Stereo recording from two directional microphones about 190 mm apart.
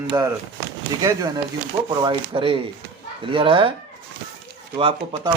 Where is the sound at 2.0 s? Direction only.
25° right (ahead or behind).